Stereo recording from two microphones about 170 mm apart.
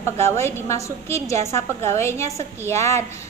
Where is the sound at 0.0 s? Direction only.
15° left (ahead or behind).